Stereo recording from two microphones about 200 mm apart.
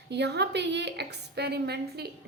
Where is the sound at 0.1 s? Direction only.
55° right (ahead or behind).